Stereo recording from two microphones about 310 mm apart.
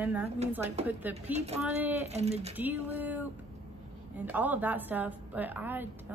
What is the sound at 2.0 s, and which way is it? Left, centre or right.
Speech, right.